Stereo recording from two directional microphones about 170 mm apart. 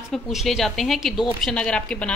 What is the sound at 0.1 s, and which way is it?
A woman's voice, centre (ahead or behind).